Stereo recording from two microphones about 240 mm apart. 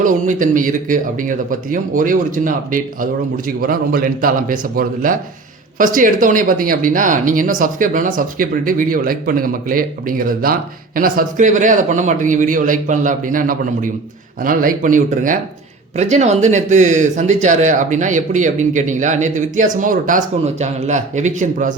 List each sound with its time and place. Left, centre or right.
0.0 s speech: right